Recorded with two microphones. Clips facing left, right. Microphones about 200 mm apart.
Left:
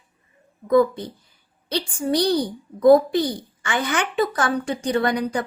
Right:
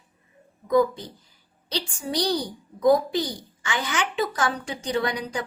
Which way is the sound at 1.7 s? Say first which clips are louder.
Left 6 dB; 55° left (ahead or behind).